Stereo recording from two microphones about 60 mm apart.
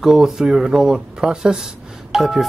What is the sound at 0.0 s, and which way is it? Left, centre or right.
Speech, centre.